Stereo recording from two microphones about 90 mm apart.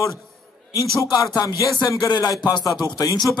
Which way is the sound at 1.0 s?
40° left (ahead or behind).